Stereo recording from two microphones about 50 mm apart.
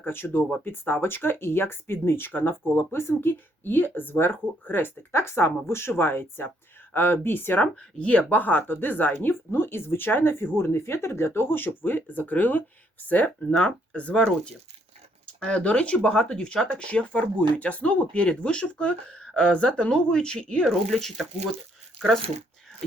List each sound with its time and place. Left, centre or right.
0.0 s speech: left
5.1 s speech: left
7.6 s speech: left
9.5 s speech: left
20.7 s speech: centre